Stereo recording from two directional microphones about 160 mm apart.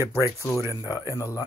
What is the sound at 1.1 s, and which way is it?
Speech, 20° left (ahead or behind).